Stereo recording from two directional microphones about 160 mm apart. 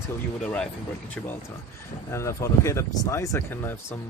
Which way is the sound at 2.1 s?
15° left (ahead or behind).